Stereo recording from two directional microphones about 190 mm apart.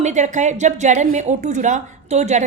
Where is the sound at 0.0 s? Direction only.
40° right (ahead or behind).